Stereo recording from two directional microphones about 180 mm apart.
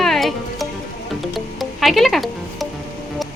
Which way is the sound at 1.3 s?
Centre (ahead or behind).